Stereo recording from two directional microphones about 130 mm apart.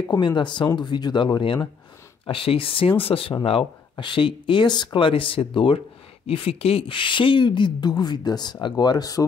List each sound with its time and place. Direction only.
0.1 s speech: 35° left (ahead or behind)